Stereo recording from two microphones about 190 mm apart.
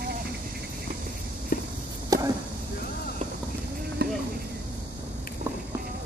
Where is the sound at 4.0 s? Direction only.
60° right (ahead or behind).